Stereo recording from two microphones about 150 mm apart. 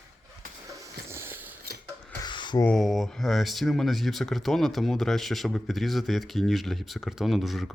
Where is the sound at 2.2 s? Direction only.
30° left (ahead or behind).